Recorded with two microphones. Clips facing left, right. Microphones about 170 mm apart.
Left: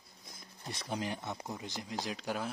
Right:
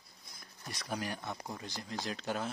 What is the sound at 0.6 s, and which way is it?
Speech, 25° left (ahead or behind).